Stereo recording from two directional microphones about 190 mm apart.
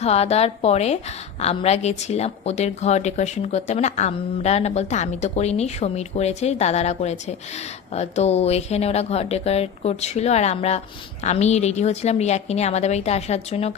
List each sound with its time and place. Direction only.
0.0 s a woman's voice: 35° left (ahead or behind)